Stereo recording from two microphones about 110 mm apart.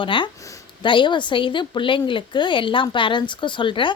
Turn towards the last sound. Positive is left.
turn(degrees=50)  # may be behind; listen again after turning